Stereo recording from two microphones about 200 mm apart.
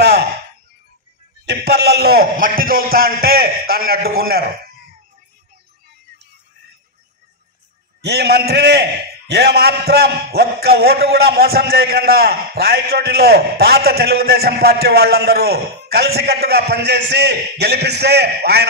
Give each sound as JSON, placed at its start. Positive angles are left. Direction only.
{"t": 0.0, "sound": "a sound", "side_deg": -55}
{"t": 1.4, "sound": "a man's voice", "side_deg": -55}
{"t": 8.0, "sound": "a man's voice", "side_deg": -55}